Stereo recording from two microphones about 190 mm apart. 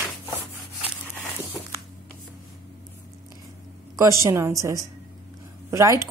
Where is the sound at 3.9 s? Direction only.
15° right (ahead or behind).